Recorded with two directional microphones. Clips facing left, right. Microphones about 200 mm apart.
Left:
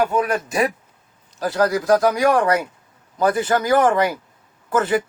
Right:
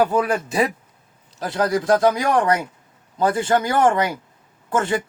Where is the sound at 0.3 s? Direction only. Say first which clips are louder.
Even; 30° right (ahead or behind).